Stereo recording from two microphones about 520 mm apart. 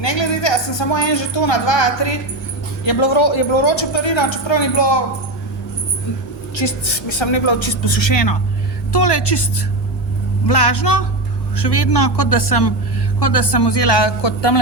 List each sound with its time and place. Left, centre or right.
0.0 s a woman's voice: left
6.5 s a woman's voice: left